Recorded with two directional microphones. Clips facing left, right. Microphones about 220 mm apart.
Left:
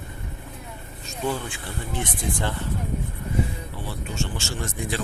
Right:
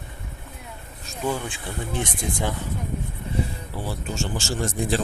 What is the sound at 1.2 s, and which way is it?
Speech, 15° right (ahead or behind).